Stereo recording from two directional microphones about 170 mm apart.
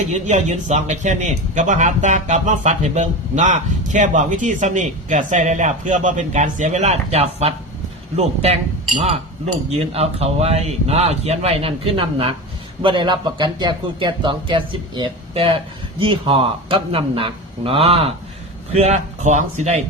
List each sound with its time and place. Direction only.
0.0 s speech: 45° right (ahead or behind)
9.6 s speech: 35° right (ahead or behind)